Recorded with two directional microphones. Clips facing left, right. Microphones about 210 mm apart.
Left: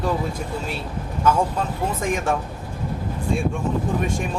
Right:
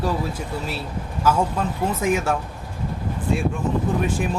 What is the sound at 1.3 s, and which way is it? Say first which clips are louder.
Speech: even; 5° right (ahead or behind).